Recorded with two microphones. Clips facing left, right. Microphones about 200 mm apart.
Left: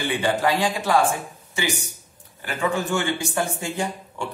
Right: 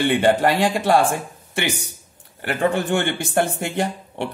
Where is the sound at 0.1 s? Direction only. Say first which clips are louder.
Right 5 dB; 60° right (ahead or behind).